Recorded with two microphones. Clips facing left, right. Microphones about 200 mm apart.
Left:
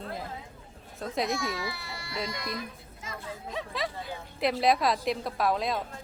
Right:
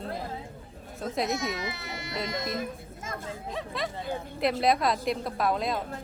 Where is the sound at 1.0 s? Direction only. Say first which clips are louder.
Right 1 dB; centre (ahead or behind).